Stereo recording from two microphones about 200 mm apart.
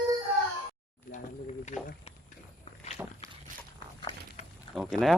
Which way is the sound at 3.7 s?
25° left (ahead or behind).